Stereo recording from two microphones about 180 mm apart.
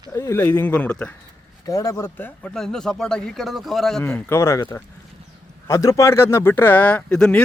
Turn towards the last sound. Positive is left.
turn(degrees=5)  # may be behind; listen again after turning